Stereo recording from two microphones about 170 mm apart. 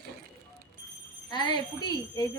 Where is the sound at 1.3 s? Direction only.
25° left (ahead or behind).